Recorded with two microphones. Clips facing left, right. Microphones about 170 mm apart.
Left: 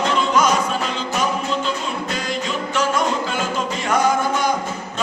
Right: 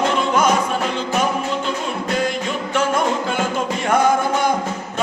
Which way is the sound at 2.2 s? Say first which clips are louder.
Right 2 dB; 55° right (ahead or behind).